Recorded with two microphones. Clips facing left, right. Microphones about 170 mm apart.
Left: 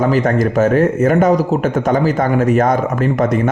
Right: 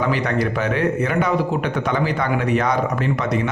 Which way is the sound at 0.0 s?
45° left (ahead or behind).